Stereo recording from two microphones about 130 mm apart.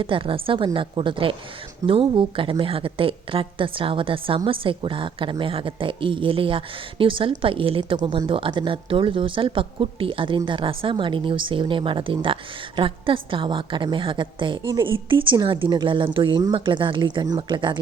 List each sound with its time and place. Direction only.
0.0 s a woman's voice: 45° right (ahead or behind)